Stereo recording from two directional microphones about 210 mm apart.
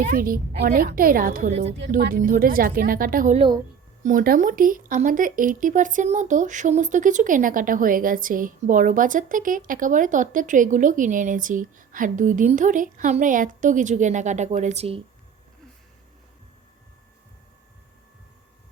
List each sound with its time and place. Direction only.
0.0 s a woman's voice: 45° right (ahead or behind)
1.9 s a woman's voice: 45° right (ahead or behind)
3.3 s speech: 25° right (ahead or behind)
4.0 s speech: 40° right (ahead or behind)